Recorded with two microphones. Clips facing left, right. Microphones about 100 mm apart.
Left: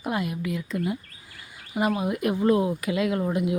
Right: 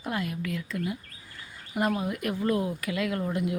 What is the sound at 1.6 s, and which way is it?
Bird, 5° left (ahead or behind).